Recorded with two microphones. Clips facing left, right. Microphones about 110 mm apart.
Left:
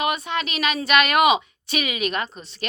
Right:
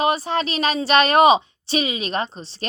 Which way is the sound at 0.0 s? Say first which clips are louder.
Right 4 dB; 35° right (ahead or behind).